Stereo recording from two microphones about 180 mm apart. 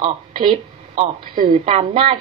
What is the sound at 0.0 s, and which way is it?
Speech, 25° right (ahead or behind).